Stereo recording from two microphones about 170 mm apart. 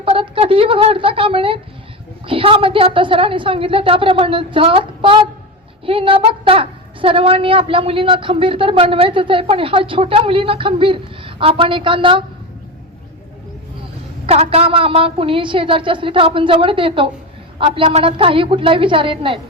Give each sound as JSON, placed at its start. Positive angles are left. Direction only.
{"t": 0.0, "sound": "a woman's voice", "side_deg": -30}
{"t": 14.3, "sound": "a woman's voice", "side_deg": -35}